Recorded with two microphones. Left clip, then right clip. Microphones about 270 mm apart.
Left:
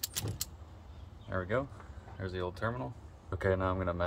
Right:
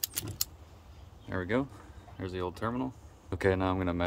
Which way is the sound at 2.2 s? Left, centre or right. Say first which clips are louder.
Right 2 dB; right.